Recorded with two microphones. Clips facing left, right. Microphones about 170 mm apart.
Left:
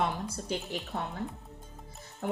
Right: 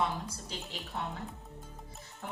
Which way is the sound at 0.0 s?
55° left (ahead or behind).